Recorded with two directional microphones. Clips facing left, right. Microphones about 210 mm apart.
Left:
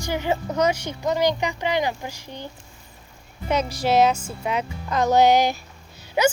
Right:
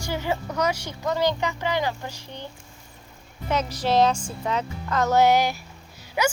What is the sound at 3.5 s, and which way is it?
A woman's voice, 10° left (ahead or behind).